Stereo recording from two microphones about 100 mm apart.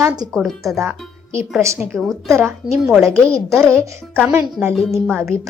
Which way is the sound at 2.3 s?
25° right (ahead or behind).